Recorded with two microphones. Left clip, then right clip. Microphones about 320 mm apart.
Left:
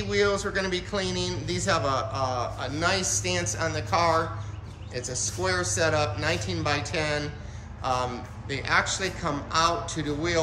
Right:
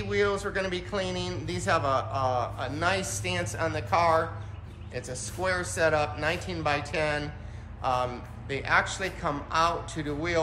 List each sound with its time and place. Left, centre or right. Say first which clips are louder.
0.1 s a man's voice: left 2 dB; centre